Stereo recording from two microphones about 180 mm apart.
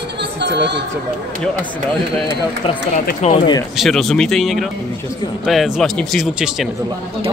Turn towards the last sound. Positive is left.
turn(degrees=0)  # may be behind; listen again after turning